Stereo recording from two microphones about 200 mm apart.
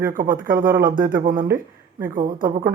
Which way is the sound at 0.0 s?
45° right (ahead or behind).